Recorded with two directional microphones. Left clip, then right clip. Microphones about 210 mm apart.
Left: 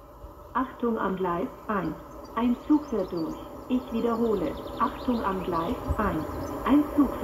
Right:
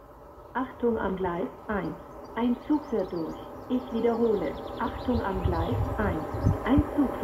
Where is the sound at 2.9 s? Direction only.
30° left (ahead or behind).